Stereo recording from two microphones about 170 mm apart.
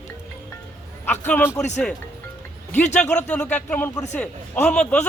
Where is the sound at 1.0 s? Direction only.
10° left (ahead or behind).